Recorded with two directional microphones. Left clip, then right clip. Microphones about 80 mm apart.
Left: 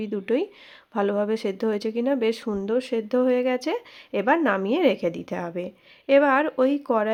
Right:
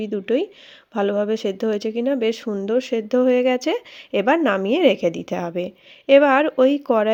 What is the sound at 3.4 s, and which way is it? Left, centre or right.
A woman's voice, right.